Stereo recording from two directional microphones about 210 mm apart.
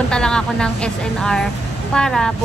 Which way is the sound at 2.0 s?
5° left (ahead or behind).